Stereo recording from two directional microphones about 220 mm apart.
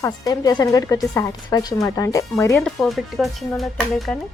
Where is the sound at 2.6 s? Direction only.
Centre (ahead or behind).